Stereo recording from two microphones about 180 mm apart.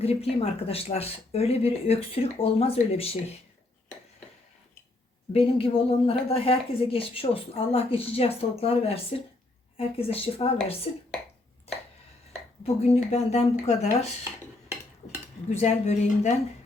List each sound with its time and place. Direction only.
0.0 s a woman's voice: 35° left (ahead or behind)
5.3 s a woman's voice: 30° left (ahead or behind)
12.6 s a woman's voice: 35° left (ahead or behind)
15.4 s a woman's voice: 40° left (ahead or behind)